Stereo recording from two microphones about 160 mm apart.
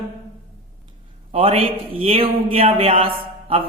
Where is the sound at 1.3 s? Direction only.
40° right (ahead or behind).